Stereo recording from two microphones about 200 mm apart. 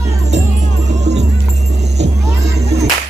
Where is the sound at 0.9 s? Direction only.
35° right (ahead or behind).